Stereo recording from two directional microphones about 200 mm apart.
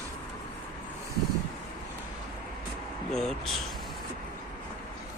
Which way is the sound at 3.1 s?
Centre (ahead or behind).